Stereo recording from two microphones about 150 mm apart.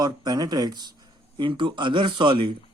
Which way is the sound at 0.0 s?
25° right (ahead or behind).